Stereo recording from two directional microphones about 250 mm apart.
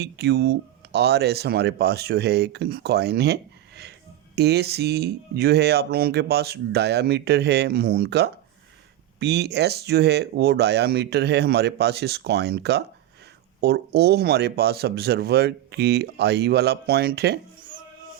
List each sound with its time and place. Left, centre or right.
0.0 s speech: right
4.4 s speech: right